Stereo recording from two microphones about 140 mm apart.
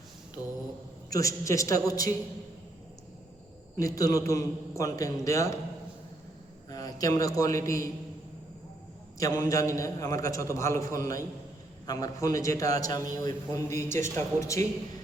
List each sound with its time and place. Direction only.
0.4 s a man's voice: 25° left (ahead or behind)
3.8 s a man's voice: 25° left (ahead or behind)
6.7 s a man's voice: 25° left (ahead or behind)
9.1 s a man's voice: 25° left (ahead or behind)